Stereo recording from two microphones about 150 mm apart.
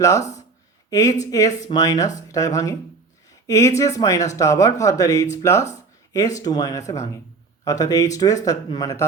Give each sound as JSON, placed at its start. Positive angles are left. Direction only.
{"t": 0.2, "sound": "speech", "side_deg": 50}
{"t": 0.9, "sound": "speech", "side_deg": 20}